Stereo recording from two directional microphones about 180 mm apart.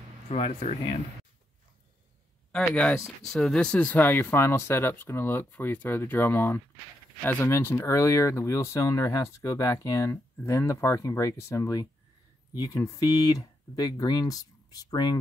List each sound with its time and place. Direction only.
0.3 s speech: 35° left (ahead or behind)
2.5 s speech: 5° left (ahead or behind); by 15.1 s 20° left (ahead or behind)